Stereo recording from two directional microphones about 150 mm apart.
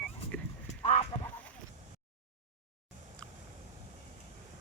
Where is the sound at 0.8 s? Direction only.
45° left (ahead or behind).